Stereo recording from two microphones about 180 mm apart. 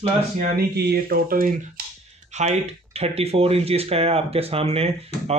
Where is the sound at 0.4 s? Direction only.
60° right (ahead or behind).